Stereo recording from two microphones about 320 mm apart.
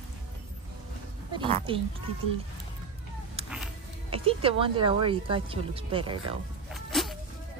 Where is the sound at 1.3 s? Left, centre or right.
Centre.